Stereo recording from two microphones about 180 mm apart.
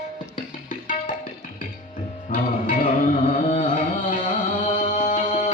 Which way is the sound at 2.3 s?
50° left (ahead or behind).